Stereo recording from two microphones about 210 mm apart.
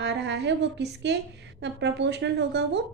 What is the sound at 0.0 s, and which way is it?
A woman's voice, 55° right (ahead or behind).